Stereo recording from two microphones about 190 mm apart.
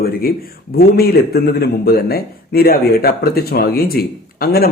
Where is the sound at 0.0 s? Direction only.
50° left (ahead or behind).